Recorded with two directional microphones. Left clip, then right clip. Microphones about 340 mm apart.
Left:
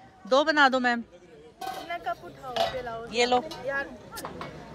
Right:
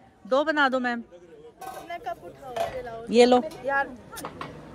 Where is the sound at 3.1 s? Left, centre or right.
Centre.